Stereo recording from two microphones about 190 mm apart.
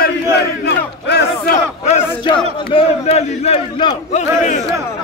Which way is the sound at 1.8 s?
30° left (ahead or behind).